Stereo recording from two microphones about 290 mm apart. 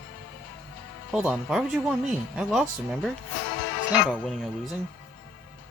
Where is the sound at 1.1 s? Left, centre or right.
Centre.